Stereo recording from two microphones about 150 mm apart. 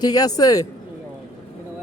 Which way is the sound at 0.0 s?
25° left (ahead or behind).